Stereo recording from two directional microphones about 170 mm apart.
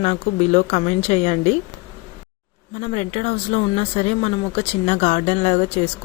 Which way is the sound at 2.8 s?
40° left (ahead or behind).